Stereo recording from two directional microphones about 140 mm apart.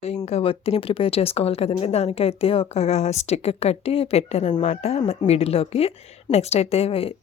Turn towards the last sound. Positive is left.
turn(degrees=45)  # may be behind; listen again after turning